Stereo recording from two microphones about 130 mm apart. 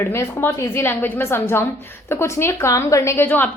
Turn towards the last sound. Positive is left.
turn(degrees=15)  # may be behind; listen again after turning